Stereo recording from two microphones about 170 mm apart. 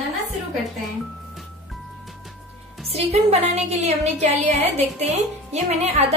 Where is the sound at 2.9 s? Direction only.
35° right (ahead or behind).